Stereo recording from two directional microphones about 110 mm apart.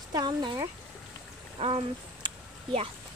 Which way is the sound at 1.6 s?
60° right (ahead or behind).